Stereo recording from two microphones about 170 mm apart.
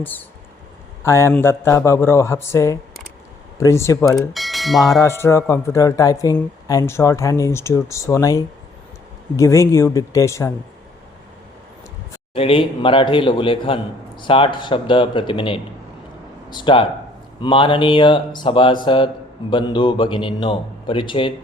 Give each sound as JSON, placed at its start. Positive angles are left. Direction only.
{"t": 0.0, "sound": "speech", "side_deg": 10}
{"t": 4.0, "sound": "speech", "side_deg": 0}
{"t": 4.8, "sound": "speech", "side_deg": 20}
{"t": 12.3, "sound": "a man's voice", "side_deg": 35}